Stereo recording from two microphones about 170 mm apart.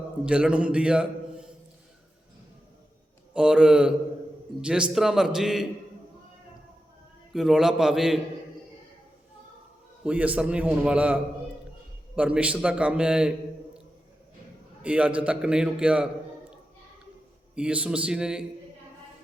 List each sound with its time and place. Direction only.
0.3 s a man's voice: 5° right (ahead or behind)
3.3 s a man's voice: 5° right (ahead or behind)
7.3 s a man's voice: centre (ahead or behind)
10.0 s a man's voice: 10° right (ahead or behind)
14.8 s a man's voice: 5° right (ahead or behind)
17.5 s a man's voice: 5° right (ahead or behind)